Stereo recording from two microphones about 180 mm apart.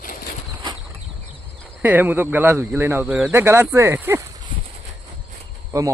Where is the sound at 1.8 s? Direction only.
10° right (ahead or behind).